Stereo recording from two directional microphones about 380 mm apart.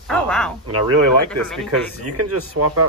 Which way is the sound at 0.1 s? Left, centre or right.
Centre.